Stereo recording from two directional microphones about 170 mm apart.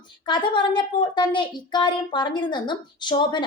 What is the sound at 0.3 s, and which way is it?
A woman's voice, 25° left (ahead or behind).